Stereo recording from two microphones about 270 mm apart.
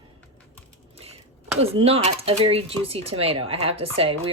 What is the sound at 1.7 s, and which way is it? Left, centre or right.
Speech, right.